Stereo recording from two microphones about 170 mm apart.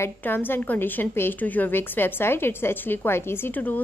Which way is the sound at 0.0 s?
10° left (ahead or behind).